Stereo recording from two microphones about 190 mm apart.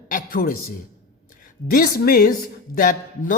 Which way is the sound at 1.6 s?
50° left (ahead or behind).